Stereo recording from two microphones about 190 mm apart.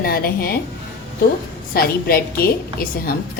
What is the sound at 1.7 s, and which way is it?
A woman's voice, 50° left (ahead or behind).